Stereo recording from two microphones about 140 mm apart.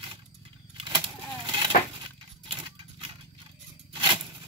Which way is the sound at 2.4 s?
35° right (ahead or behind).